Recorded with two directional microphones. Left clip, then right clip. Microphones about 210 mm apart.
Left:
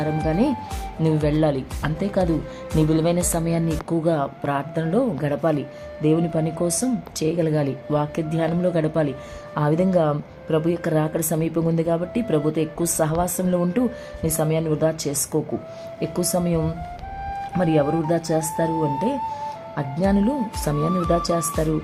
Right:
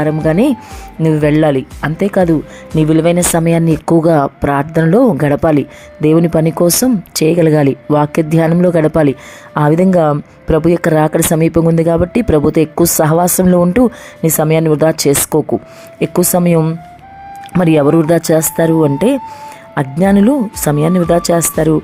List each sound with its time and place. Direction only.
0.0 s speech: 35° right (ahead or behind)
2.7 s speech: 25° right (ahead or behind)